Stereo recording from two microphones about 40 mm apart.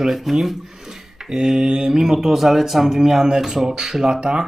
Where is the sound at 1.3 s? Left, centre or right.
Centre.